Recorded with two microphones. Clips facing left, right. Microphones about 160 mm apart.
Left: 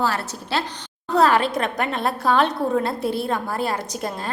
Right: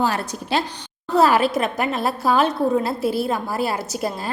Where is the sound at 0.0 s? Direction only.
15° right (ahead or behind).